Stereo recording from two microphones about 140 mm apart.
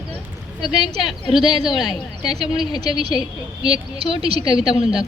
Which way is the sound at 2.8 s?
45° right (ahead or behind).